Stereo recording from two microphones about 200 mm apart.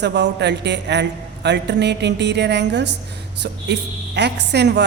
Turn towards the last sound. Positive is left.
turn(degrees=-55)  # may be behind; listen again after turning